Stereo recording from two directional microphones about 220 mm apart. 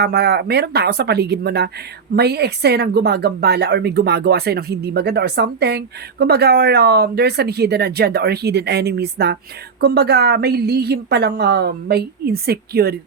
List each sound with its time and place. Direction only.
0.0 s a woman's voice: 50° right (ahead or behind)